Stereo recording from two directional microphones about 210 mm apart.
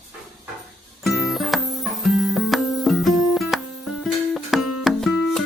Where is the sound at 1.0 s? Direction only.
Centre (ahead or behind).